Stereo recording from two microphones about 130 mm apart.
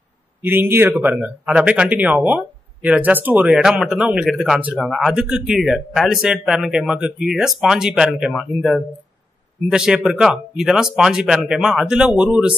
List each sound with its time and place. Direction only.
0.4 s speech: 15° right (ahead or behind)